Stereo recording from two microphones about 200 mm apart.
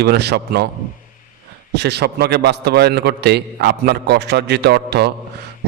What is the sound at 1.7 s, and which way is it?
A man's voice, 55° right (ahead or behind).